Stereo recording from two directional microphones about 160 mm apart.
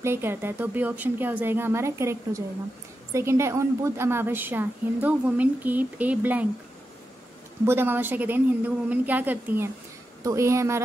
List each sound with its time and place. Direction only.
0.0 s a woman's voice: 15° right (ahead or behind)
7.6 s a woman's voice: 15° right (ahead or behind)